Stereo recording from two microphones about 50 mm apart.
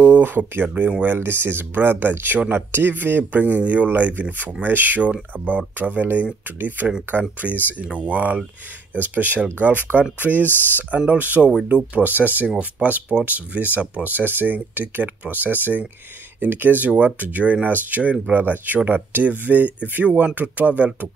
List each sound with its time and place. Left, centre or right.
0.0 s speech: right
7.8 s speech: right
10.4 s speech: left
11.1 s speech: right
12.4 s speech: right
20.1 s speech: right
20.3 s speech: right